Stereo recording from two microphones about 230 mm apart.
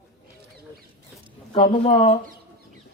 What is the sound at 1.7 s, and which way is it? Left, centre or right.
Speech, left.